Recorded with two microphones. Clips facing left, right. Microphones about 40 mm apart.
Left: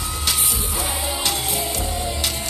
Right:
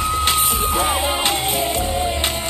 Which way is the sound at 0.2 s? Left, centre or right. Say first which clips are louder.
Right 7 dB; right.